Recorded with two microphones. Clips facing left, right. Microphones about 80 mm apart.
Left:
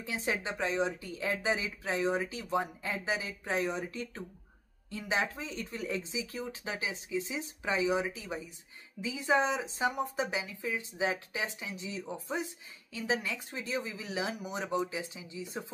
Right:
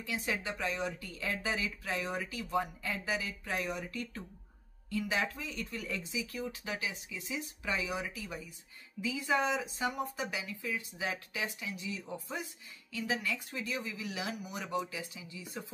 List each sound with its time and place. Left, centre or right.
0.0 s a woman's voice: left